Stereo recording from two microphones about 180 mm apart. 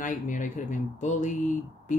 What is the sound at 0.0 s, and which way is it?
Speech, 45° left (ahead or behind).